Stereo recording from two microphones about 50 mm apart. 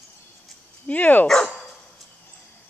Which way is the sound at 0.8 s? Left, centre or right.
Left.